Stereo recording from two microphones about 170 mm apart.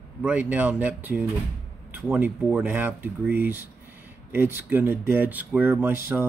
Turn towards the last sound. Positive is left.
turn(degrees=-15)  # may be behind; listen again after turning